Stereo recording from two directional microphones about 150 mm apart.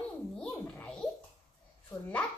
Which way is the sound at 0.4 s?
5° left (ahead or behind).